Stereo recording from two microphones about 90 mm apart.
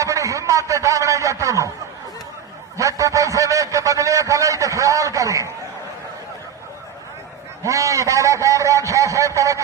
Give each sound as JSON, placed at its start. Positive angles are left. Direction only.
{"t": 0.0, "sound": "a man's voice", "side_deg": -35}
{"t": 2.7, "sound": "a man's voice", "side_deg": -35}
{"t": 7.6, "sound": "a man's voice", "side_deg": -35}